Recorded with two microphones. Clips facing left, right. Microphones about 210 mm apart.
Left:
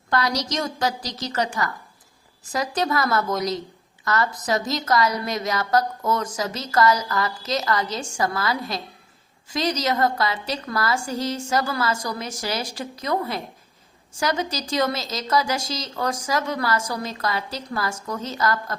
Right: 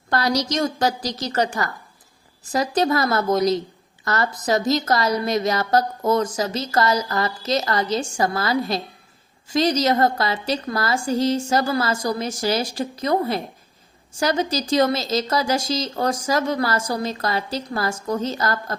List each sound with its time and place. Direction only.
0.1 s a woman's voice: 35° right (ahead or behind)